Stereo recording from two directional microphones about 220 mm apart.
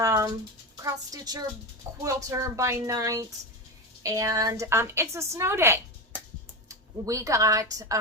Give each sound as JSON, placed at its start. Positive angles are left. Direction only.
{"t": 0.0, "sound": "a woman's voice", "side_deg": -15}